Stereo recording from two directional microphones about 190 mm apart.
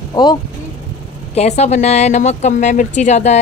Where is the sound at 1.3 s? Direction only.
35° left (ahead or behind).